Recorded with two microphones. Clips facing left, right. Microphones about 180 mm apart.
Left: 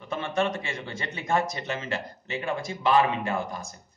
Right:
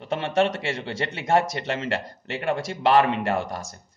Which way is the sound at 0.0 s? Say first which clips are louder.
Right 5 dB; 70° right (ahead or behind).